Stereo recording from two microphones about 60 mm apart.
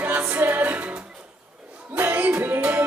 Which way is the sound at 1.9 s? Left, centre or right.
Right.